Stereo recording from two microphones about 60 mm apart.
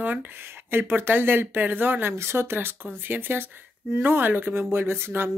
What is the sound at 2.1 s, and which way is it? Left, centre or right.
Speech, right.